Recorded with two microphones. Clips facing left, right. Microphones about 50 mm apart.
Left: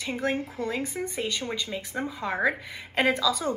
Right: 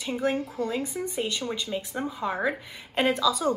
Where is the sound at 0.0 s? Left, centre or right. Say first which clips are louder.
Right 1 dB; left.